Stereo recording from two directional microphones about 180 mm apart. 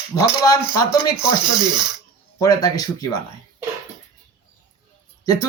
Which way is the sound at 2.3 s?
20° left (ahead or behind).